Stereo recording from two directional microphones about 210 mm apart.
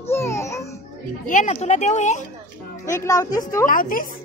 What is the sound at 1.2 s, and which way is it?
Speech, 35° left (ahead or behind).